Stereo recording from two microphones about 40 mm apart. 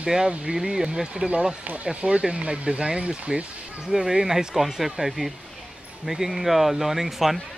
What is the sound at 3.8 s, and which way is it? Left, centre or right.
Speech, centre.